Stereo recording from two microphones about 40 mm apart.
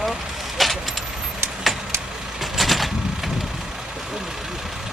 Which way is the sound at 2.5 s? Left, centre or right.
Centre.